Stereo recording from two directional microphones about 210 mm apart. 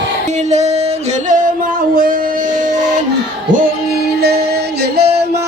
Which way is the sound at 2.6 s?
35° right (ahead or behind).